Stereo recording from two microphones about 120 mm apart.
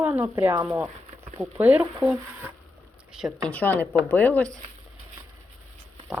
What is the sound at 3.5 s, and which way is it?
Speech, 15° left (ahead or behind).